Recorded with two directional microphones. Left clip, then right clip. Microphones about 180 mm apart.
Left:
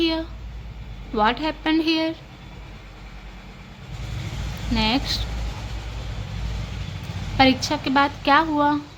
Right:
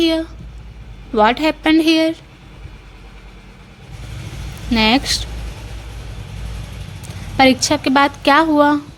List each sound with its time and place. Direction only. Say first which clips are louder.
0.0 s a sound: right 6 dB; 35° right (ahead or behind)
1.1 s a woman's voice: right 7 dB; 40° right (ahead or behind)
4.7 s speech: right 8 dB; 50° right (ahead or behind)
7.3 s a woman's voice: right 6 dB; 40° right (ahead or behind)